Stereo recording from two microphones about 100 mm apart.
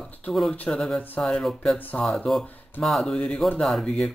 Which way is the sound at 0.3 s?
5° left (ahead or behind).